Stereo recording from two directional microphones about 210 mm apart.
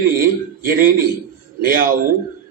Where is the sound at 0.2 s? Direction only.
45° right (ahead or behind).